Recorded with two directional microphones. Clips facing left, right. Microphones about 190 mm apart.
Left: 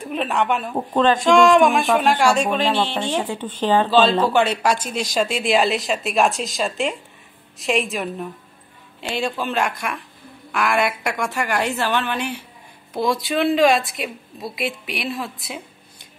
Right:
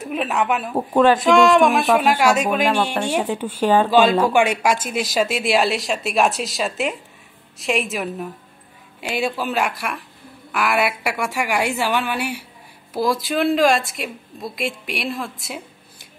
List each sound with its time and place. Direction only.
0.0 s a woman's voice: 5° right (ahead or behind)